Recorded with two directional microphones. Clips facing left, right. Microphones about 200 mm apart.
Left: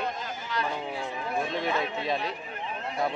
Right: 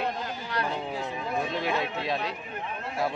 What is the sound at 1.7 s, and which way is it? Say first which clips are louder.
Speech: even; centre (ahead or behind).